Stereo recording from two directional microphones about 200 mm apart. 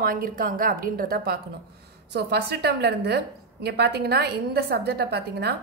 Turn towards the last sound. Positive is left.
turn(degrees=-55)  # may be behind; listen again after turning